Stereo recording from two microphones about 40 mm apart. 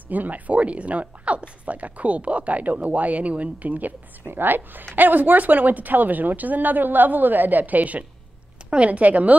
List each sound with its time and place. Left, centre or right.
0.1 s speech: right
4.3 s a woman's voice: right